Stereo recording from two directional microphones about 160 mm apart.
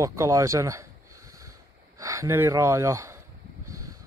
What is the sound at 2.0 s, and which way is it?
Speech, 15° right (ahead or behind).